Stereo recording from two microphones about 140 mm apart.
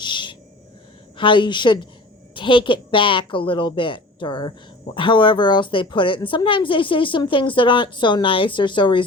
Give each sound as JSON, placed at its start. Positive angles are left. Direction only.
{"t": 0.0, "sound": "owl", "side_deg": 35}
{"t": 1.1, "sound": "a woman's voice", "side_deg": 35}